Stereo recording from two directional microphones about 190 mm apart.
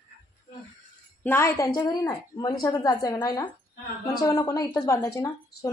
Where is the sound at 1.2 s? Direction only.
10° left (ahead or behind).